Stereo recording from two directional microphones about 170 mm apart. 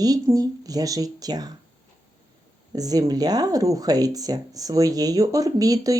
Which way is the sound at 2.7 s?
20° right (ahead or behind).